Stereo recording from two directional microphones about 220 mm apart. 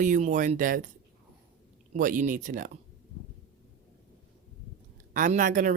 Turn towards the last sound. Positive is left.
turn(degrees=-35)  # may be behind; listen again after turning